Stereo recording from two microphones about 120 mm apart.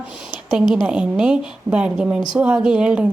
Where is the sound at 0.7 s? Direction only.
5° right (ahead or behind).